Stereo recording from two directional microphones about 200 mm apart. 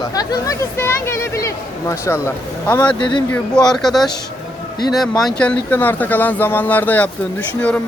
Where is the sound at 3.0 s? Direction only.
25° left (ahead or behind).